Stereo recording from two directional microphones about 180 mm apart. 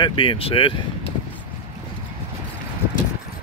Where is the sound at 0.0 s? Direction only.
30° left (ahead or behind).